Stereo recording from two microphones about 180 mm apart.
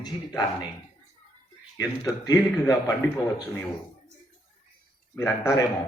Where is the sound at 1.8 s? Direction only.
20° left (ahead or behind).